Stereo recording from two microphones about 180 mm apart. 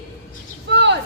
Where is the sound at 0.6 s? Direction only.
75° right (ahead or behind).